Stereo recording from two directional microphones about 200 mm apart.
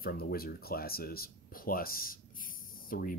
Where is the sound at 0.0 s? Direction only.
50° left (ahead or behind).